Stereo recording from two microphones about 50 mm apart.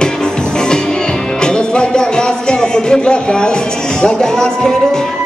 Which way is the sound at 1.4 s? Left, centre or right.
Centre.